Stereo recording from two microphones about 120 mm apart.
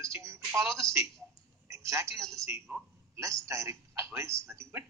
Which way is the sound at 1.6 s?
25° right (ahead or behind).